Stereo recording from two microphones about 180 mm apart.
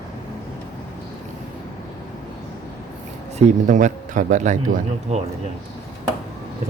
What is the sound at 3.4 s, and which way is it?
A man's voice, 40° right (ahead or behind).